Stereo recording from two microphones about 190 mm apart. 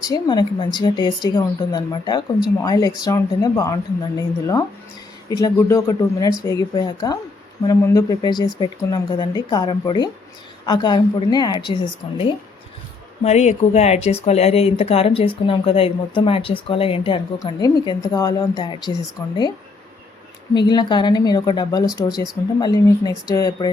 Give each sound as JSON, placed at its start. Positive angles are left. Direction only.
{"t": 0.1, "sound": "speech", "side_deg": 25}
{"t": 20.5, "sound": "speech", "side_deg": 25}